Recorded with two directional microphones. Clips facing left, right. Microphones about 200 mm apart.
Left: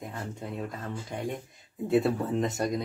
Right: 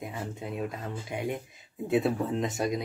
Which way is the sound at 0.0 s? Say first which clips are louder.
Right 1 dB; 5° right (ahead or behind).